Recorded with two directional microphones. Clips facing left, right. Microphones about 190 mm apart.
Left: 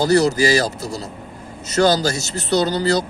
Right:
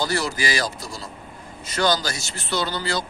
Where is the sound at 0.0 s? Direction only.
40° left (ahead or behind).